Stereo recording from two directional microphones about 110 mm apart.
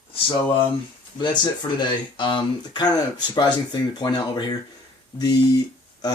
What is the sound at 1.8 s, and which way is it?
Speech, 45° left (ahead or behind).